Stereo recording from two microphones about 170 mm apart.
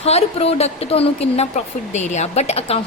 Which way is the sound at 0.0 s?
35° left (ahead or behind).